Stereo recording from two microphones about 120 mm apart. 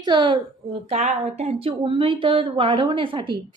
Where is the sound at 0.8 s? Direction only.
65° right (ahead or behind).